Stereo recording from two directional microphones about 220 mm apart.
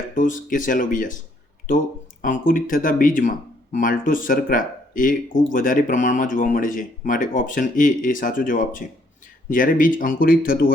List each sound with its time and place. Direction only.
0.1 s speech: 35° left (ahead or behind)
2.2 s speech: 35° left (ahead or behind)